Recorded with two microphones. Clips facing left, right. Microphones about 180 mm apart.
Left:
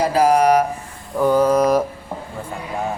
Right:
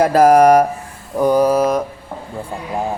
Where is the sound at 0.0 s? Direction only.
50° right (ahead or behind).